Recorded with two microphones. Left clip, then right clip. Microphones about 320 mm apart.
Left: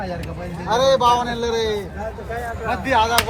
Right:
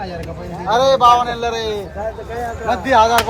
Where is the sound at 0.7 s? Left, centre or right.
Right.